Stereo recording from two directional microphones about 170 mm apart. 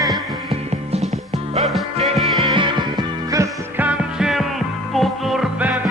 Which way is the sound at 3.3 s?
15° right (ahead or behind).